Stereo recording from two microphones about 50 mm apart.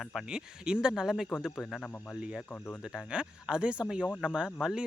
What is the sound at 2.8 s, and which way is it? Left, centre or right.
Speech, centre.